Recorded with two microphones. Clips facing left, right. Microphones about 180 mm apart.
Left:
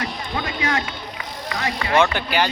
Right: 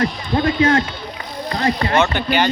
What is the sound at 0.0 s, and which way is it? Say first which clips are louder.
Speech: right 9 dB; 45° right (ahead or behind).